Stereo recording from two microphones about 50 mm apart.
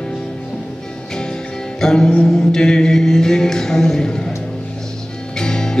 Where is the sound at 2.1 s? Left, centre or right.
Centre.